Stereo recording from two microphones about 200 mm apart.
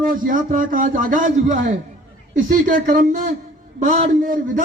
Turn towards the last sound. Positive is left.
turn(degrees=-40)  # may be behind; listen again after turning